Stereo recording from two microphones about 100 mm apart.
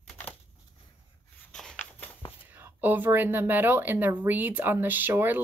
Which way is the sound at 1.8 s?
20° left (ahead or behind).